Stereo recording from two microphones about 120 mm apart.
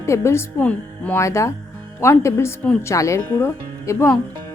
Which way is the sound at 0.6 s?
10° left (ahead or behind).